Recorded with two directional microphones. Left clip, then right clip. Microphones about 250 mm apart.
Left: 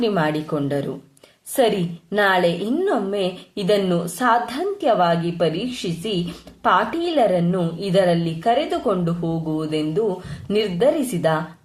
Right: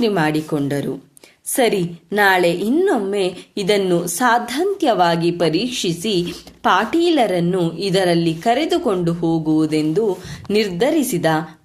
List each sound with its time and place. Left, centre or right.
0.0 s a woman's voice: right
2.1 s a woman's voice: right